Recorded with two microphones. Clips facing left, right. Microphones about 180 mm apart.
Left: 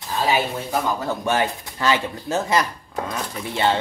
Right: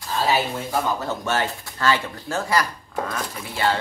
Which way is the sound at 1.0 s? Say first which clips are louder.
Left 3 dB; 15° left (ahead or behind).